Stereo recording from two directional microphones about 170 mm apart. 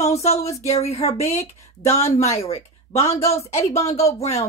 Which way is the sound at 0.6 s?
35° left (ahead or behind).